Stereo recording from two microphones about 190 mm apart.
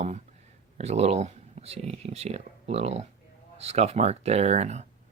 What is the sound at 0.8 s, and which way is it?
Speech, 35° right (ahead or behind).